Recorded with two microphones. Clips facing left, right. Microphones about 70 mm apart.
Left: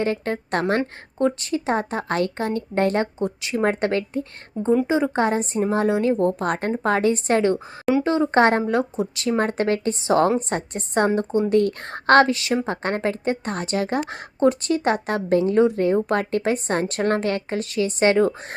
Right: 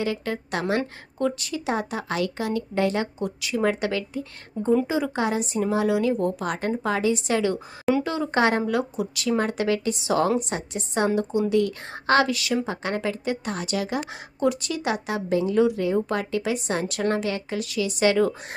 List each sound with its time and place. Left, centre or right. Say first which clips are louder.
0.0 s speech: left 3 dB; left
0.8 s speech: left 4 dB; left
3.2 s speech: left 2 dB; left
4.6 s speech: left 2 dB; centre
4.9 s speech: left 4 dB; left
8.0 s speech: left 5 dB; left
12.3 s a woman's voice: left 3 dB; left